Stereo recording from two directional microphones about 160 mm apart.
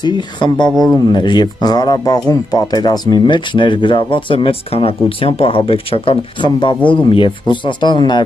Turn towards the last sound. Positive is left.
turn(degrees=30)  # may be behind; listen again after turning